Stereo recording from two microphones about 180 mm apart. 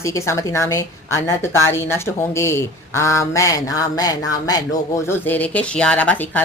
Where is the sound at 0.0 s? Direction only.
15° left (ahead or behind).